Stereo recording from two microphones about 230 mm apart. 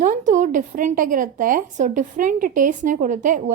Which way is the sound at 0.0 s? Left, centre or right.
Right.